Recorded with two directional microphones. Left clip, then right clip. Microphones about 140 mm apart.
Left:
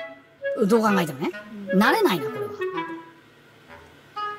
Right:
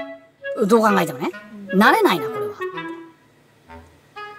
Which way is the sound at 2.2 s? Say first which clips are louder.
Right 3 dB; 5° left (ahead or behind).